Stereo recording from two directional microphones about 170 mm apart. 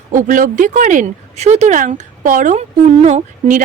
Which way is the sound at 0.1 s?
50° right (ahead or behind).